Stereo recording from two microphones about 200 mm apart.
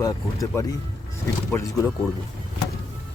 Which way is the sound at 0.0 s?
15° left (ahead or behind).